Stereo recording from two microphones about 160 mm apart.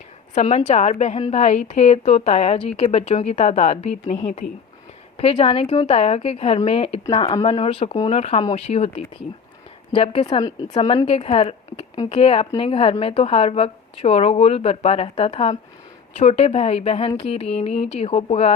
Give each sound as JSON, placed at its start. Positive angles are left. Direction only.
{"t": 0.3, "sound": "a woman's voice", "side_deg": 45}
{"t": 9.9, "sound": "a woman's voice", "side_deg": 35}